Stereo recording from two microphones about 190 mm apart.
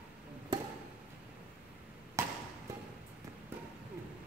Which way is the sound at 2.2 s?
15° right (ahead or behind).